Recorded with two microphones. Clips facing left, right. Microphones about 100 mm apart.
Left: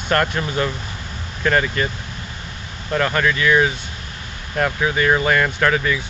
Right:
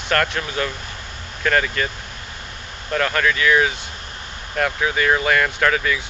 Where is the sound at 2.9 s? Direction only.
10° left (ahead or behind).